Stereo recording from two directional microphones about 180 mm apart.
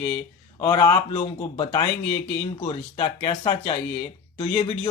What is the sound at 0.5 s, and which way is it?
Speech, 20° left (ahead or behind).